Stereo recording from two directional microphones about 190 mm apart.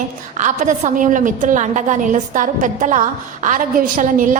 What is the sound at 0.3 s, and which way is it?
A woman's voice, 40° right (ahead or behind).